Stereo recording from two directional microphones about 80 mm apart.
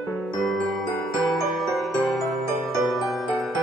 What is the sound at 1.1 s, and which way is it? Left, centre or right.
Music, centre.